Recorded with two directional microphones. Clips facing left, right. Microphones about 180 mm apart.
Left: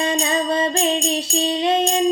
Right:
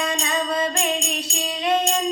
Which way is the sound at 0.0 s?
30° left (ahead or behind).